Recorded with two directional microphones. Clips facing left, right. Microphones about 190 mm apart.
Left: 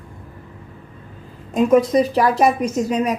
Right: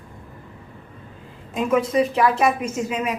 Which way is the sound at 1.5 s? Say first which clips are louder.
Left 5 dB; 40° left (ahead or behind).